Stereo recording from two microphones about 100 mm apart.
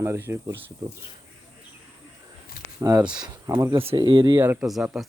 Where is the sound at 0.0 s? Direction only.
25° right (ahead or behind).